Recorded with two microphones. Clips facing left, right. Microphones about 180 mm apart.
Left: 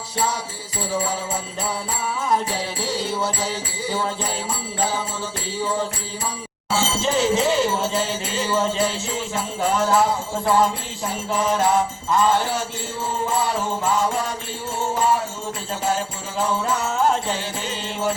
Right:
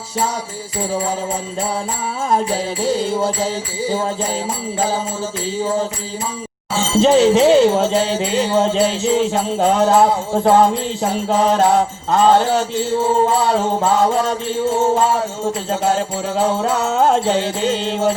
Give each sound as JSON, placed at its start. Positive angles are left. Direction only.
{"t": 2.8, "sound": "music", "side_deg": -50}
{"t": 7.0, "sound": "music", "side_deg": -65}